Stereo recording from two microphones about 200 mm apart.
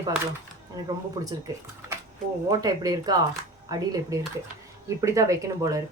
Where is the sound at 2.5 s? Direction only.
20° right (ahead or behind).